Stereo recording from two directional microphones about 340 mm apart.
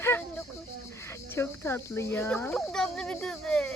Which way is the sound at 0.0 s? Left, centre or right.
Centre.